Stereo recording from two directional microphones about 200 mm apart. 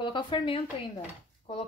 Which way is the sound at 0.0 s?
25° left (ahead or behind).